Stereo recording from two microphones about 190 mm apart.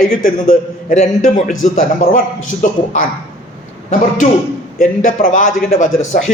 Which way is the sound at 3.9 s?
40° left (ahead or behind).